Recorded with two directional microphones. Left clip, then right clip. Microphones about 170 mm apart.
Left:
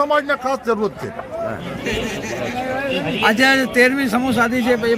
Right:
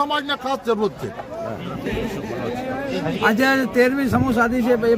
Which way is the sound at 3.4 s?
55° right (ahead or behind).